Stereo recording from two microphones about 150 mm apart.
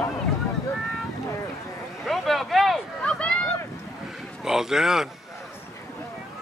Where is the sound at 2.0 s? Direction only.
Centre (ahead or behind).